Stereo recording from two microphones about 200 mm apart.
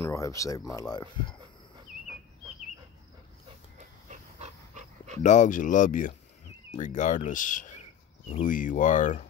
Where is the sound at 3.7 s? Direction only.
35° right (ahead or behind).